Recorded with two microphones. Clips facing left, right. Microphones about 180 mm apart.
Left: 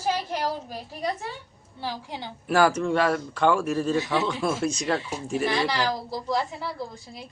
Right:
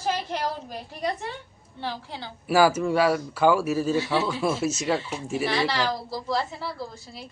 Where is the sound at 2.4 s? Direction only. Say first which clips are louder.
Right 1 dB; 5° right (ahead or behind).